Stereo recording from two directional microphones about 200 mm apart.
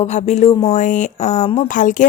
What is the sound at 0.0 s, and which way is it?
Speech, 35° left (ahead or behind).